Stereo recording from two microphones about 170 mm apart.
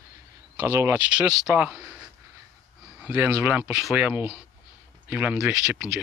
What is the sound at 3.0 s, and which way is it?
Speech, 10° right (ahead or behind).